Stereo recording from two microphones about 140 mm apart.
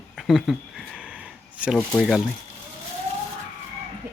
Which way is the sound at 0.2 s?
Centre (ahead or behind).